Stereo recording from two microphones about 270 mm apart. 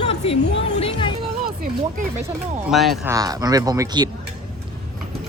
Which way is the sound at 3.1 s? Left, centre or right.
Centre.